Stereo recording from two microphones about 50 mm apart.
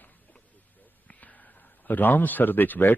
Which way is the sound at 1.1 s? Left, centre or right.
Left.